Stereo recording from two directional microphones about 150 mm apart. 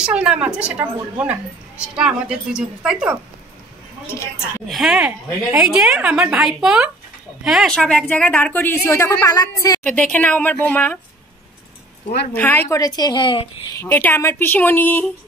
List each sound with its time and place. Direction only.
0.0 s a woman's voice: 5° right (ahead or behind)
4.1 s a woman's voice: 15° left (ahead or behind)
4.6 s a woman's voice: centre (ahead or behind); by 9.8 s 25° left (ahead or behind)
9.8 s a woman's voice: 10° left (ahead or behind)
12.4 s a woman's voice: 10° left (ahead or behind)
12.6 s a woman's voice: 25° left (ahead or behind)
13.7 s a woman's voice: 15° left (ahead or behind)